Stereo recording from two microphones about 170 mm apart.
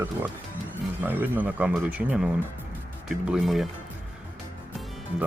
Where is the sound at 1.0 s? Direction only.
10° right (ahead or behind).